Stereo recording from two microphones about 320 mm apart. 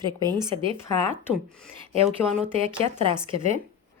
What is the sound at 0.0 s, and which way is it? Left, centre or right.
Speech, centre.